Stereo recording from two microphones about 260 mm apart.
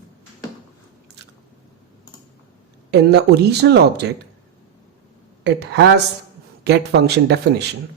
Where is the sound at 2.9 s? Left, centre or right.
Right.